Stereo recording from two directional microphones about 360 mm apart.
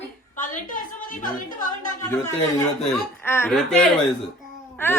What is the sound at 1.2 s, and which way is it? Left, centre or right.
Speech, left.